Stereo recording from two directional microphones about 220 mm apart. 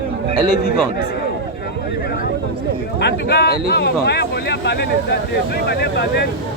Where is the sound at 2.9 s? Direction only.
50° left (ahead or behind).